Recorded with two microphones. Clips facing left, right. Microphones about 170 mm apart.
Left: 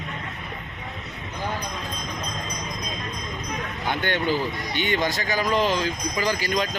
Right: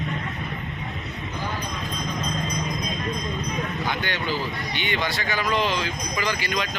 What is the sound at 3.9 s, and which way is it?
Speech, 50° left (ahead or behind).